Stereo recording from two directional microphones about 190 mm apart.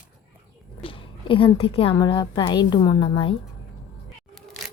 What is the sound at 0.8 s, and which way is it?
A woman's voice, 30° left (ahead or behind).